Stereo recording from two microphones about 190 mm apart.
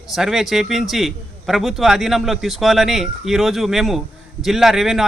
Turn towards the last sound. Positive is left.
turn(degrees=0)  # may be behind; listen again after turning